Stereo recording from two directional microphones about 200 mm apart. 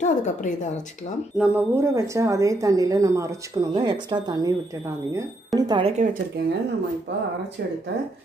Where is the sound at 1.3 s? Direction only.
5° right (ahead or behind); by 6.2 s 35° right (ahead or behind).